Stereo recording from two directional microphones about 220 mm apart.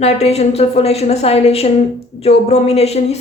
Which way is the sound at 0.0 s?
30° left (ahead or behind).